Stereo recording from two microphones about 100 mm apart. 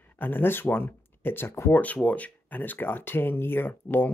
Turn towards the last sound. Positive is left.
turn(degrees=20)  # may be behind; listen again after turning